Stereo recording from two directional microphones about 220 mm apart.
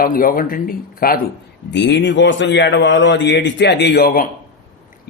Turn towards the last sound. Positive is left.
turn(degrees=40)  # may be behind; listen again after turning